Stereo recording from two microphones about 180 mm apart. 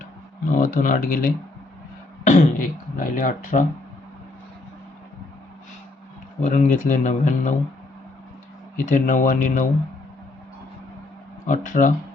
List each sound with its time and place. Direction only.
0.5 s speech: 50° left (ahead or behind)
6.4 s speech: 40° left (ahead or behind)
8.7 s speech: 45° left (ahead or behind)
11.4 s speech: 45° left (ahead or behind)